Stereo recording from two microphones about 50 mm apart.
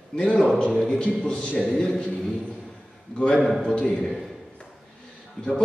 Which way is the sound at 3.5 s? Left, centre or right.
Centre.